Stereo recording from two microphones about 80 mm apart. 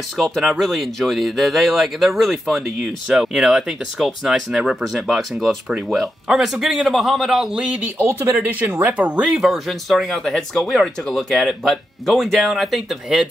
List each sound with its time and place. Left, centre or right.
0.2 s speech: centre
7.7 s speech: right
9.4 s speech: centre